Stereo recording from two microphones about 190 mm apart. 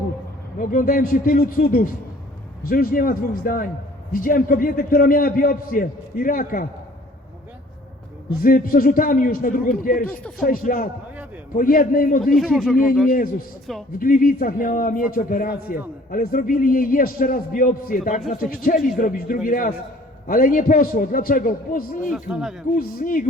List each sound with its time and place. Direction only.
0.6 s a man's voice: 45° left (ahead or behind)
8.3 s a man's voice: 50° left (ahead or behind)
12.2 s speech: centre (ahead or behind)
13.1 s a man's voice: 45° left (ahead or behind)
13.7 s speech: centre (ahead or behind)
14.0 s a man's voice: 50° left (ahead or behind)
22.1 s speech: centre (ahead or behind)
22.8 s a man's voice: 50° left (ahead or behind)